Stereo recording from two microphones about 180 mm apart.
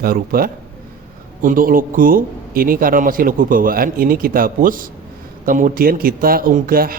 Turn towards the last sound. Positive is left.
turn(degrees=-55)  # may be behind; listen again after turning